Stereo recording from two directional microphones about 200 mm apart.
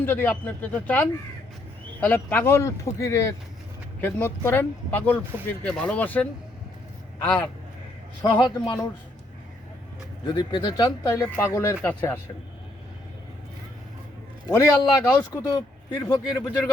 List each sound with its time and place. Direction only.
0.0 s speech: 10° left (ahead or behind)
8.2 s speech: 20° left (ahead or behind)
10.2 s speech: 20° left (ahead or behind)
14.5 s speech: 15° left (ahead or behind)